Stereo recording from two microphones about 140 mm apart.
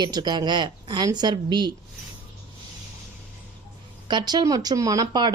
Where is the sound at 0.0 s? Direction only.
30° right (ahead or behind).